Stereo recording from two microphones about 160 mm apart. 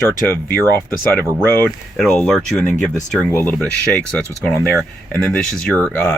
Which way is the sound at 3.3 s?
10° left (ahead or behind).